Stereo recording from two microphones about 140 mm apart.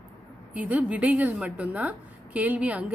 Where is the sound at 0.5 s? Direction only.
10° right (ahead or behind).